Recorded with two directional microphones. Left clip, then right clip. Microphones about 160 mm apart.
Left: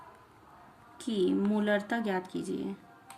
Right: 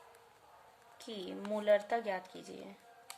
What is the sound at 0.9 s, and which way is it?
Speech, 40° left (ahead or behind).